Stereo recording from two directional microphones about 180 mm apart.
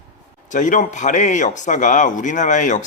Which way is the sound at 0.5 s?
45° left (ahead or behind).